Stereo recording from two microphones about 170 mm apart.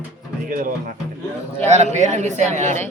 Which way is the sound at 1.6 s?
40° right (ahead or behind).